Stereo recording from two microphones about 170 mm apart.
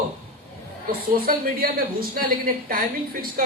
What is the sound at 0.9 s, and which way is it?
A woman's voice, 65° right (ahead or behind).